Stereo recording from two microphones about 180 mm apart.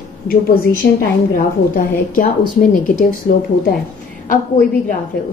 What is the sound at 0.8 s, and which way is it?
Speech, 75° left (ahead or behind).